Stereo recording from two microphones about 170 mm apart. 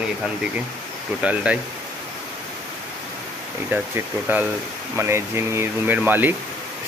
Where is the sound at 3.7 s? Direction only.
15° right (ahead or behind).